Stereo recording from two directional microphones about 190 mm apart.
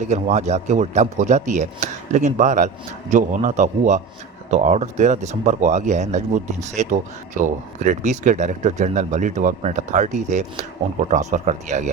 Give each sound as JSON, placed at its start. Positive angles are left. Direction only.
{"t": 0.0, "sound": "speech", "side_deg": -40}